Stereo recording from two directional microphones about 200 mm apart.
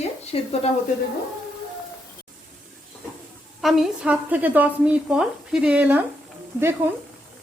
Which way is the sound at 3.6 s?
Centre (ahead or behind).